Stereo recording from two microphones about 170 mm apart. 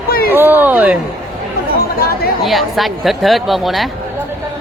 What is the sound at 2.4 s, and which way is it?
Speech, centre (ahead or behind).